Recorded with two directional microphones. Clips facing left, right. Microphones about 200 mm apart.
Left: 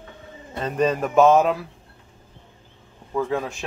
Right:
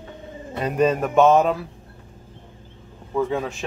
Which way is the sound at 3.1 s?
Centre (ahead or behind).